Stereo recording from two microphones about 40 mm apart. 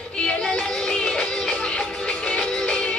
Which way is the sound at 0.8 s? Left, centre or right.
Left.